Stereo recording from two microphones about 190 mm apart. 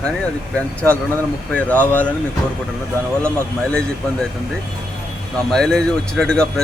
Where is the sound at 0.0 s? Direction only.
5° left (ahead or behind).